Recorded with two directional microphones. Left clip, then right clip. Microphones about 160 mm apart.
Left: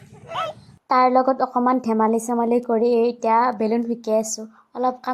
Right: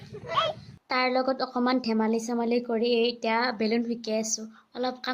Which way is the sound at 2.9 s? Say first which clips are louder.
Left 6 dB; 90° left.